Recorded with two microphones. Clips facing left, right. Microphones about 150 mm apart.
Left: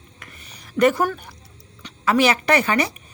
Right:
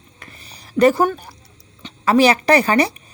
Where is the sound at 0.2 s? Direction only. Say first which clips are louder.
Right 3 dB; 35° right (ahead or behind).